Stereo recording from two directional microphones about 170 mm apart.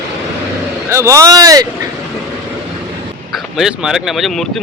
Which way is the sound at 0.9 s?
15° right (ahead or behind).